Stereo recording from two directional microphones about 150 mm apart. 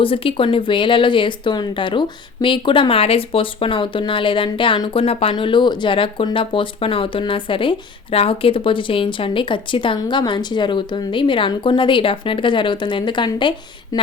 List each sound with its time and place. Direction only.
0.0 s speech: 35° left (ahead or behind)